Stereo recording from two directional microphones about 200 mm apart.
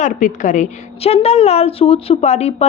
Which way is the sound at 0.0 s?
40° left (ahead or behind).